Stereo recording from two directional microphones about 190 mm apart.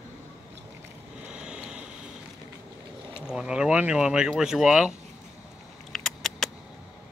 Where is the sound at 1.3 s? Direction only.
5° right (ahead or behind).